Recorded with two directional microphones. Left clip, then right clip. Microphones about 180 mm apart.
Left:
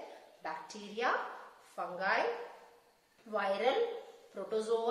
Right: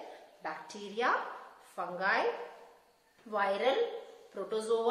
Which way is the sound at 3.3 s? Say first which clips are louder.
Right 2 dB; 15° right (ahead or behind).